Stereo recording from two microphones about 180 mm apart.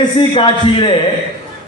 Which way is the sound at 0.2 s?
30° left (ahead or behind).